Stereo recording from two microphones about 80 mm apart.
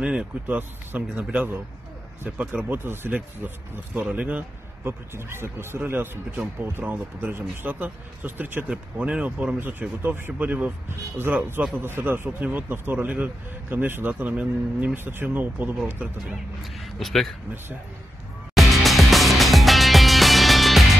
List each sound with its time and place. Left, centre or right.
0.0 s speech: centre
5.1 s speech: right
8.6 s speech: centre
16.7 s speech: centre
18.5 s music: centre